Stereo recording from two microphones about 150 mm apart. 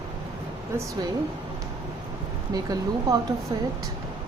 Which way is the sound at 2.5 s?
25° right (ahead or behind).